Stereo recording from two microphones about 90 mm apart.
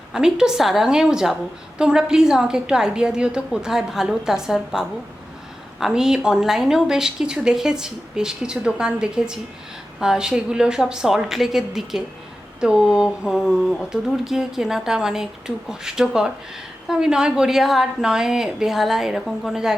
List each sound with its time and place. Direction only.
0.1 s a woman's voice: 5° right (ahead or behind)